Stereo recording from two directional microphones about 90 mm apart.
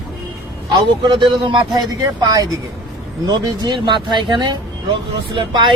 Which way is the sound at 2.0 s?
40° right (ahead or behind).